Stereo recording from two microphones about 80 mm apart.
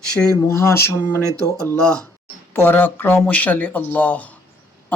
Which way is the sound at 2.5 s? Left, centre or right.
Left.